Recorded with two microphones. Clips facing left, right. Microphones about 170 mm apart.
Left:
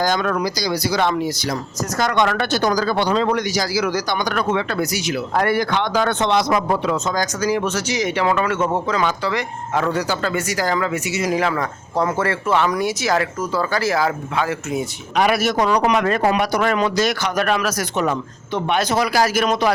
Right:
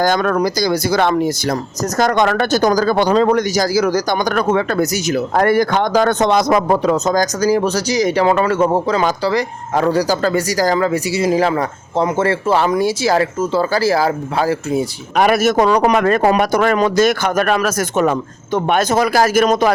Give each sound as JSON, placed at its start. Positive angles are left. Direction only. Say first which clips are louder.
{"t": 0.0, "sound": "speech", "louder": "right 5 dB", "side_deg": -50}
{"t": 15.1, "sound": "speech", "louder": "right 5 dB", "side_deg": -50}